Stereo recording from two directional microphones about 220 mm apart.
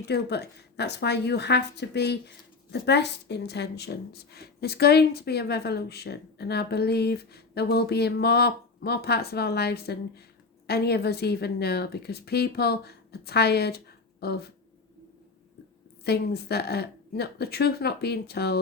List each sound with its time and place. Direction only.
0.1 s a woman's voice: 50° left (ahead or behind)
16.0 s a woman's voice: 45° left (ahead or behind)